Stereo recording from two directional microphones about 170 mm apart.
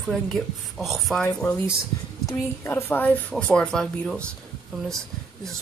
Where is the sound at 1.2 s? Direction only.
15° left (ahead or behind).